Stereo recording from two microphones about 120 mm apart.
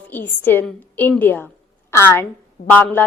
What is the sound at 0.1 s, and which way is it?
A woman's voice, 15° left (ahead or behind).